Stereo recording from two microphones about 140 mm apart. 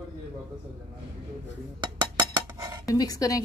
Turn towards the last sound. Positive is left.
turn(degrees=25)  # may be behind; listen again after turning